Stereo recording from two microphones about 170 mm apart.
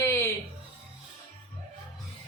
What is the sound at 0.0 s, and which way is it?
Music, 15° left (ahead or behind).